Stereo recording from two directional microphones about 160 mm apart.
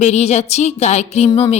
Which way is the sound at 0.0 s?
45° left (ahead or behind).